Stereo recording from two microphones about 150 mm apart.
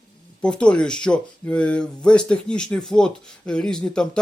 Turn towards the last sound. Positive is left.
turn(degrees=5)  # may be behind; listen again after turning